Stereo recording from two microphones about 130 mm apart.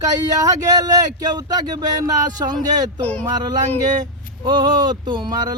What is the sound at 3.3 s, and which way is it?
Speech, 30° right (ahead or behind).